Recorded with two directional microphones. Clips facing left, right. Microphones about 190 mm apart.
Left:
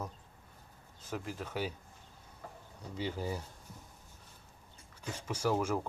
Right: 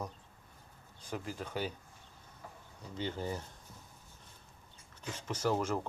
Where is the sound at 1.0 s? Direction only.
Centre (ahead or behind).